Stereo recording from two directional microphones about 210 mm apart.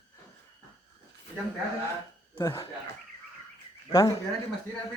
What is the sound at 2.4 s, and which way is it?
Speech, 20° left (ahead or behind).